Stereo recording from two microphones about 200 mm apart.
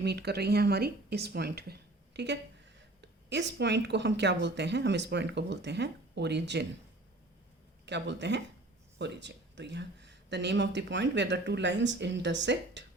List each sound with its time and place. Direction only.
0.0 s speech: 55° right (ahead or behind)
7.9 s speech: 60° right (ahead or behind)